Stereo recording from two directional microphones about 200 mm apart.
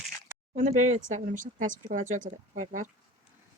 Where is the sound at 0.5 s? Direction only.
35° right (ahead or behind).